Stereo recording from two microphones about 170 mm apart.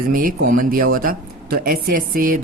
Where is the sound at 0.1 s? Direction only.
55° right (ahead or behind).